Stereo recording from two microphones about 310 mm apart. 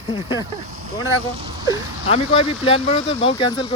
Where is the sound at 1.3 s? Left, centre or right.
Centre.